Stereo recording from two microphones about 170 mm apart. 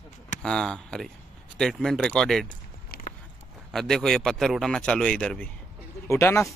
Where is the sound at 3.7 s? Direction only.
Centre (ahead or behind).